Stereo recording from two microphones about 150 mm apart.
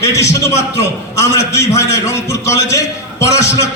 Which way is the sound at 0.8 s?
20° left (ahead or behind).